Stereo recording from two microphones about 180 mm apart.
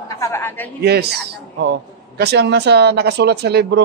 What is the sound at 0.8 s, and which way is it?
A man's voice, 65° right (ahead or behind).